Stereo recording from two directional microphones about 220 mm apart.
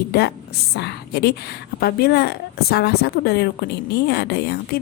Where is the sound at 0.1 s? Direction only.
45° left (ahead or behind).